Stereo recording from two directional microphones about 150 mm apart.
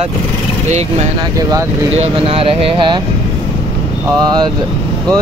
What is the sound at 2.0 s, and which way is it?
Speech, 40° right (ahead or behind).